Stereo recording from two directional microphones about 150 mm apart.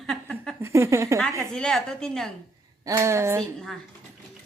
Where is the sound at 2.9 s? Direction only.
20° right (ahead or behind).